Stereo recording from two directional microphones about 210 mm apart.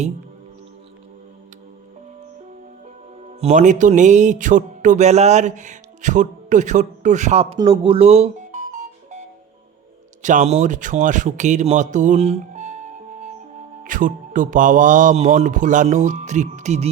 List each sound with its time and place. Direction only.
3.4 s speech: 35° right (ahead or behind)
10.2 s speech: 35° right (ahead or behind)
13.8 s speech: 40° right (ahead or behind)